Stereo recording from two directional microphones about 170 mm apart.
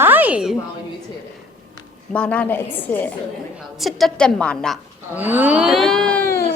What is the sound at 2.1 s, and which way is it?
A woman's voice, 5° left (ahead or behind).